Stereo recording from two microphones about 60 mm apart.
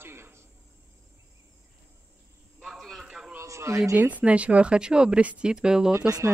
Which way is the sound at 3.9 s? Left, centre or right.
Right.